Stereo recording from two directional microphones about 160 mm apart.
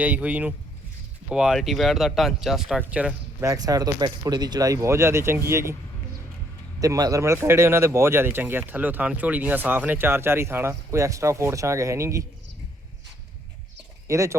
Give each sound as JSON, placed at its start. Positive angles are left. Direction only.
{"t": 0.0, "sound": "speech", "side_deg": -10}
{"t": 3.4, "sound": "speech", "side_deg": -20}
{"t": 6.7, "sound": "speech", "side_deg": -20}
{"t": 14.1, "sound": "speech", "side_deg": -20}